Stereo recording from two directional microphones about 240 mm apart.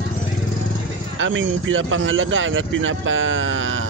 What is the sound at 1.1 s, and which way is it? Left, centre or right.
Speech, right.